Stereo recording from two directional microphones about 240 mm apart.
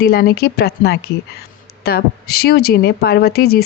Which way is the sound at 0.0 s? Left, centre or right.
Left.